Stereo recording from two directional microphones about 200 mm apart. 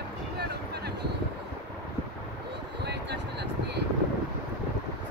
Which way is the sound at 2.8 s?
55° right (ahead or behind).